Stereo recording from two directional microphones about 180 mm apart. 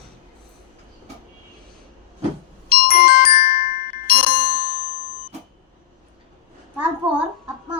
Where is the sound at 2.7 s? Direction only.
55° left (ahead or behind).